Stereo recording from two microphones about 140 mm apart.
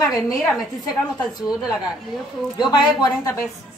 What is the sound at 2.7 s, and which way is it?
Speech, 30° left (ahead or behind).